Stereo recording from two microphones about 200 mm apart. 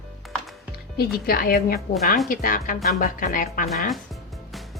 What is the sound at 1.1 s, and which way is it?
Speech, 45° left (ahead or behind).